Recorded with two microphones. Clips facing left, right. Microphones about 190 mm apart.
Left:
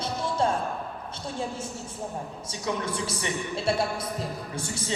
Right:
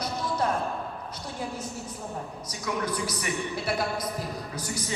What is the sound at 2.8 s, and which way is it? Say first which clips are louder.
A woman's voice: even; 25° left (ahead or behind).